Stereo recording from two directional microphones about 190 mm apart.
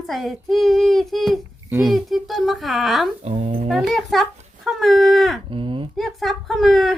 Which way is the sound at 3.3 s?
35° right (ahead or behind).